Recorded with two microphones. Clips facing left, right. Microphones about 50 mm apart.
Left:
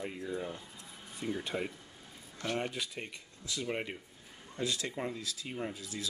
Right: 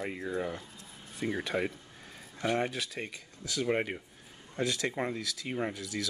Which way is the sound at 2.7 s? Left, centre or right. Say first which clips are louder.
Right 3 dB; right.